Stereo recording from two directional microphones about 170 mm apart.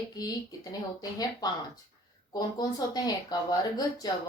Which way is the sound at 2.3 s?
20° left (ahead or behind).